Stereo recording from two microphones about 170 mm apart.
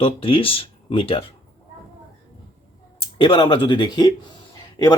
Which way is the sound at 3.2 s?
30° left (ahead or behind).